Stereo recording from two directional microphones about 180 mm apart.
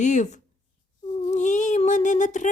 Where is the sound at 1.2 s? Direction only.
40° left (ahead or behind).